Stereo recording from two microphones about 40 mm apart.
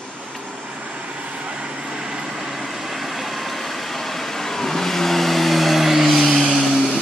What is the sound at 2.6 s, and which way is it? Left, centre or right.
Vehicle, centre.